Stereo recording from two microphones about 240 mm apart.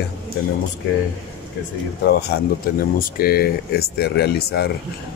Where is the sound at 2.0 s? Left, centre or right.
Left.